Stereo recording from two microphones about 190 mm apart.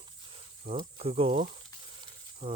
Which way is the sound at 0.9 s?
30° right (ahead or behind).